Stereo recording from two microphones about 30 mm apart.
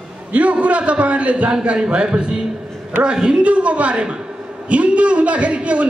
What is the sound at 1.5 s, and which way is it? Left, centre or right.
A woman's voice, right.